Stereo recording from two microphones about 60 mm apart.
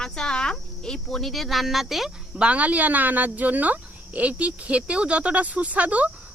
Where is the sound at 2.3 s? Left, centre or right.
Right.